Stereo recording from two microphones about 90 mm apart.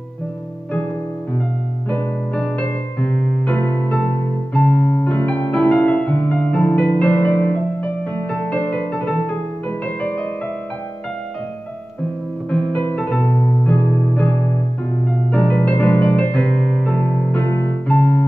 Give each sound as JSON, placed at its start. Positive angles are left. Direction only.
{"t": 1.9, "sound": "music", "side_deg": 10}
{"t": 4.6, "sound": "piano", "side_deg": 15}
{"t": 8.4, "sound": "music", "side_deg": 10}
{"t": 12.4, "sound": "music", "side_deg": 10}
{"t": 15.3, "sound": "music", "side_deg": 10}
{"t": 17.5, "sound": "music", "side_deg": 25}
{"t": 17.8, "sound": "music", "side_deg": 15}